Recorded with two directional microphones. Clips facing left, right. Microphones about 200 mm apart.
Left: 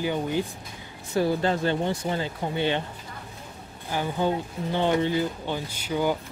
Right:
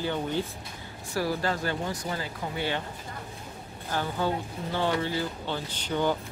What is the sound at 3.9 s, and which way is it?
Speech, 15° left (ahead or behind).